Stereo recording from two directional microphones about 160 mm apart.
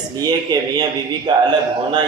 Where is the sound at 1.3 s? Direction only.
30° right (ahead or behind).